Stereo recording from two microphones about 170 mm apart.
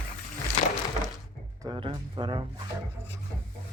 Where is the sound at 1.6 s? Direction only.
25° right (ahead or behind).